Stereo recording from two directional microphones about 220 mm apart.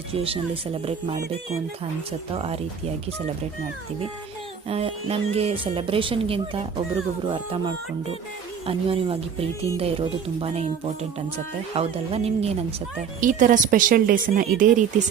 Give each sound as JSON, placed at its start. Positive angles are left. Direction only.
{"t": 0.2, "sound": "speech", "side_deg": -25}
{"t": 2.3, "sound": "speech", "side_deg": -25}
{"t": 4.7, "sound": "speech", "side_deg": -25}
{"t": 11.7, "sound": "speech", "side_deg": -25}